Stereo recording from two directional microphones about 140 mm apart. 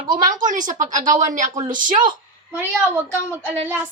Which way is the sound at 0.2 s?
65° right (ahead or behind).